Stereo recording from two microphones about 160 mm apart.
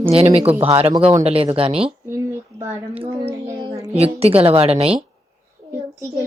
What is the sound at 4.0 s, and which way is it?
A woman's voice, 40° right (ahead or behind).